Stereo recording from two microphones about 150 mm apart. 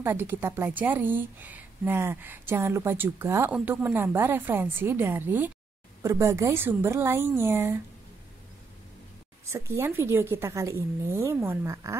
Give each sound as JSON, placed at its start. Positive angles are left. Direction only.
{"t": 0.0, "sound": "a woman's voice", "side_deg": -15}
{"t": 9.5, "sound": "a woman's voice", "side_deg": -15}